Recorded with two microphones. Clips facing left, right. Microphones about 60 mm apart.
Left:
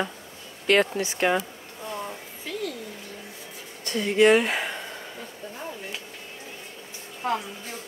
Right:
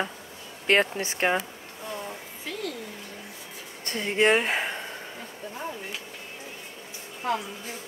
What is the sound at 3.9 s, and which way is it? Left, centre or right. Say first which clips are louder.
Speech: left 4 dB; right.